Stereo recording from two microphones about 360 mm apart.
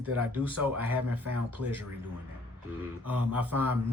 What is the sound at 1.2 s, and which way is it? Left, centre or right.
Speech, right.